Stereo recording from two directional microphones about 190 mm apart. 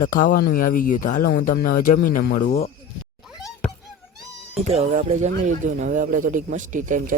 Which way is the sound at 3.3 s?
Centre (ahead or behind).